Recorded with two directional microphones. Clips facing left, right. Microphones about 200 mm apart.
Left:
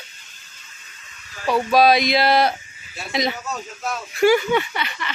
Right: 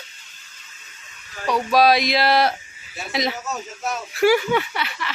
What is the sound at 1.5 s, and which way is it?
Speech, centre (ahead or behind).